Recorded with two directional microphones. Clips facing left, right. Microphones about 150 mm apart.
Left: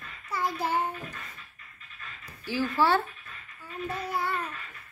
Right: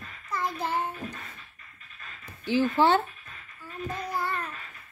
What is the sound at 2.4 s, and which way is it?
Speech, 20° right (ahead or behind).